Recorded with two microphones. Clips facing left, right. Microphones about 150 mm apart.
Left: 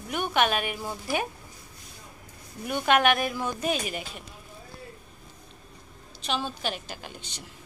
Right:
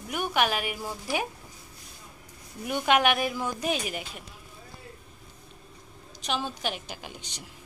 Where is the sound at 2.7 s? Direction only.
15° right (ahead or behind).